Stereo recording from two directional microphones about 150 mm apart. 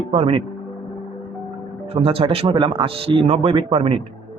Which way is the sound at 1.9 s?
40° right (ahead or behind).